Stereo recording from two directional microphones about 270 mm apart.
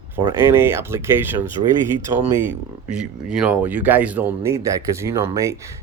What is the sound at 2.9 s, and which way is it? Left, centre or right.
Speech, centre.